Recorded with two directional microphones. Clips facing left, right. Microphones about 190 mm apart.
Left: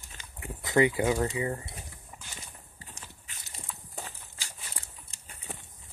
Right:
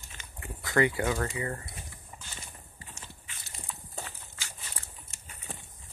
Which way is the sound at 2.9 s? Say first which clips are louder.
Even; 35° left (ahead or behind).